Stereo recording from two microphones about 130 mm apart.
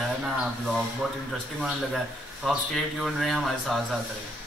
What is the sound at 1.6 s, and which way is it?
Speech, centre (ahead or behind).